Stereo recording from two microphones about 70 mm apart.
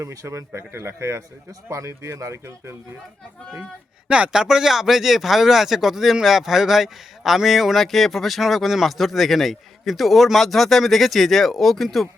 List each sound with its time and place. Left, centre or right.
0.0 s speech: right
4.1 s speech: centre